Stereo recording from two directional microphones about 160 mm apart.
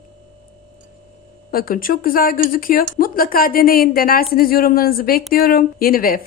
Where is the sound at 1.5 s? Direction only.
65° left (ahead or behind).